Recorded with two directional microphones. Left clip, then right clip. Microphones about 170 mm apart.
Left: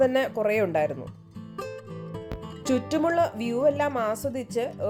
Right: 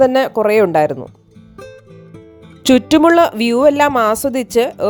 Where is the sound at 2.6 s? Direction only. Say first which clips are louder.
Right 14 dB; 60° right (ahead or behind).